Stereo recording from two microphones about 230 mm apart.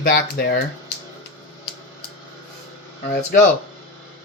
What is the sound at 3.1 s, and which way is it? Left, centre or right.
Speech, left.